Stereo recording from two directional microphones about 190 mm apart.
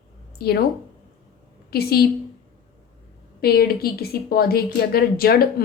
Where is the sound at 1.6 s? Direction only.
55° left (ahead or behind).